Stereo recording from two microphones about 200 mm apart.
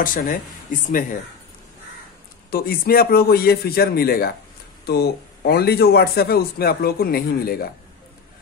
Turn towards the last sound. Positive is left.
turn(degrees=50)  # may be behind; listen again after turning